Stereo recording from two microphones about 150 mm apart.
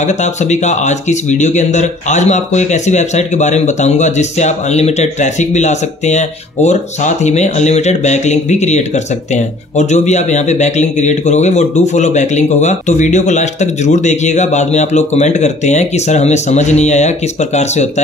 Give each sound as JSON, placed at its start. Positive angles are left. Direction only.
{"t": 0.0, "sound": "speech", "side_deg": 50}